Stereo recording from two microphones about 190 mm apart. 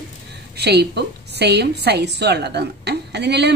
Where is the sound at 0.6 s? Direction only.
60° right (ahead or behind).